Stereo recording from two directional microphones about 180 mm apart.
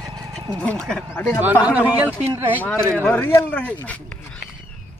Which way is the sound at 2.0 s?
10° right (ahead or behind).